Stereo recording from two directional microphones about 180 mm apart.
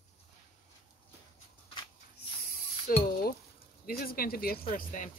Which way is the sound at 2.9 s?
50° left (ahead or behind).